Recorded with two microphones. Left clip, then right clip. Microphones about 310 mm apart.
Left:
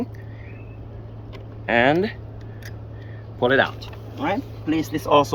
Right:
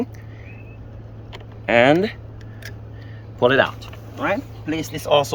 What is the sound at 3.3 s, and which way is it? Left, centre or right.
Speech, right.